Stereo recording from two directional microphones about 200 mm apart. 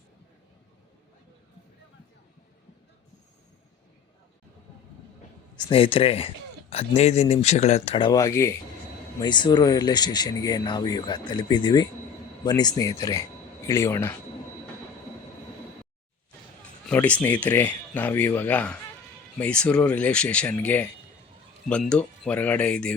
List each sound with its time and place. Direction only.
5.5 s a man's voice: 25° left (ahead or behind)
16.9 s speech: 5° left (ahead or behind)